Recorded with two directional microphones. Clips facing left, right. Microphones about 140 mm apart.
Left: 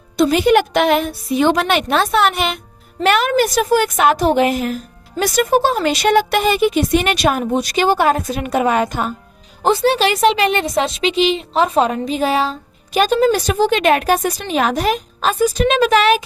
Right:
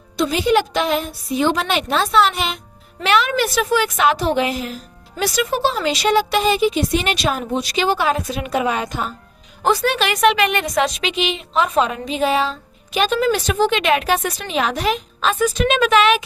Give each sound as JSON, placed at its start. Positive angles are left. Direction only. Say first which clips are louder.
{"t": 0.2, "sound": "a woman's voice", "louder": "left 4 dB", "side_deg": 55}
{"t": 9.6, "sound": "a woman's voice", "louder": "left 4 dB", "side_deg": 30}